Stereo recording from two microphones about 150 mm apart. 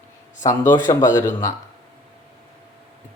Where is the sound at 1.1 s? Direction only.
15° left (ahead or behind).